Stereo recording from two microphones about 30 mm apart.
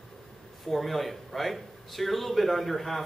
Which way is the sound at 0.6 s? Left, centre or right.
Centre.